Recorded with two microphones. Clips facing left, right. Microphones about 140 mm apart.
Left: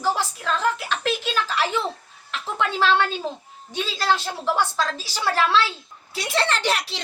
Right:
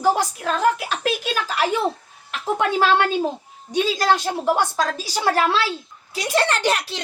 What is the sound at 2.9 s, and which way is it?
Speech, 45° right (ahead or behind).